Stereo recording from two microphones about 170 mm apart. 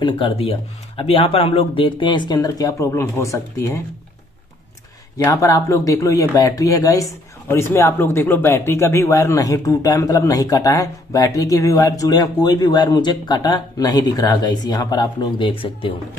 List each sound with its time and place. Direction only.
0.0 s speech: 30° left (ahead or behind)
5.2 s speech: 20° left (ahead or behind)